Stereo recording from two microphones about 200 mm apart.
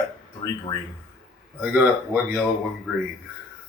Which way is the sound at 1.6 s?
5° right (ahead or behind).